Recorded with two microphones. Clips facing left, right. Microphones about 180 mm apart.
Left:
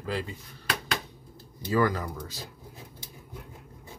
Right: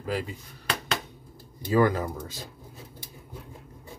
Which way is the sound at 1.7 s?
20° right (ahead or behind).